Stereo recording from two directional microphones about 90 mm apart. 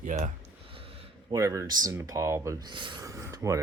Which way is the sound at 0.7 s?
90° right.